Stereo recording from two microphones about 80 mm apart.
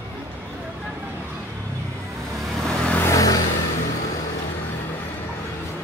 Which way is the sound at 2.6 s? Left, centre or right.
Centre.